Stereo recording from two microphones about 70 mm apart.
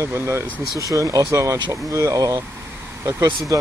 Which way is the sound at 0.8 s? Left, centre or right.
Right.